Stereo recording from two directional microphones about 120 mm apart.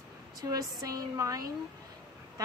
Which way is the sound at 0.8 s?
30° right (ahead or behind).